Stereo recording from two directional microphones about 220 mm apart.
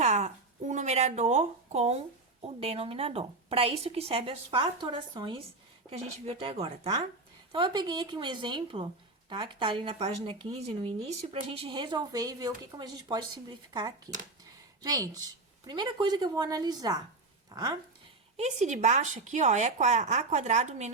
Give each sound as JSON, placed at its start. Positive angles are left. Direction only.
{"t": 0.0, "sound": "a woman's voice", "side_deg": -30}
{"t": 18.3, "sound": "speech", "side_deg": -30}